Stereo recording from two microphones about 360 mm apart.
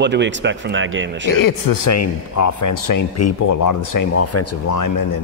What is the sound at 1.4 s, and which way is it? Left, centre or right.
A man's voice, left.